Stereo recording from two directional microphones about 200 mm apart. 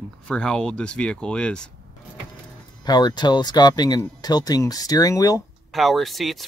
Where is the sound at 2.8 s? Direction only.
20° left (ahead or behind).